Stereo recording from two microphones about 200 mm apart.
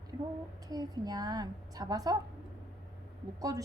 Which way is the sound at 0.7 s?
20° right (ahead or behind).